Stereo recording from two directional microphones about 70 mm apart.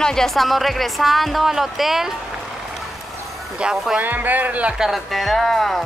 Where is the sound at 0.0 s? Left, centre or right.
Centre.